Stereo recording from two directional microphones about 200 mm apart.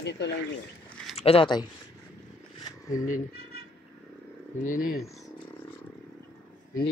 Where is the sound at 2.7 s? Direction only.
15° left (ahead or behind).